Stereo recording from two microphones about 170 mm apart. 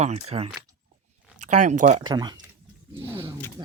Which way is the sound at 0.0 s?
40° right (ahead or behind).